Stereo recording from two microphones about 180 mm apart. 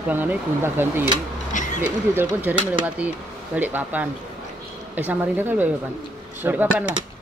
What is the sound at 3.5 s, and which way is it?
Speech, 10° right (ahead or behind).